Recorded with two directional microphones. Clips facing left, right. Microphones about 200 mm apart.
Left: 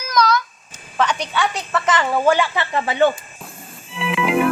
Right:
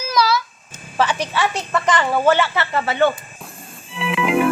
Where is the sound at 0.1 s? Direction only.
5° right (ahead or behind).